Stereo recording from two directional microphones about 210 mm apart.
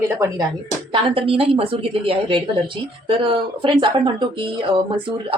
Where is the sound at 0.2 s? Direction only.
15° right (ahead or behind).